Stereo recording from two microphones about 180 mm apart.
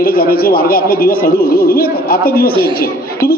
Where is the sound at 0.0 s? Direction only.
55° left (ahead or behind).